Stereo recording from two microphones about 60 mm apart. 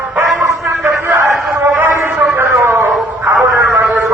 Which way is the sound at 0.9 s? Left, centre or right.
Right.